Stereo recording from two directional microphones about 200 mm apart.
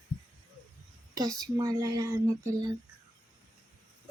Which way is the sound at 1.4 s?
15° right (ahead or behind).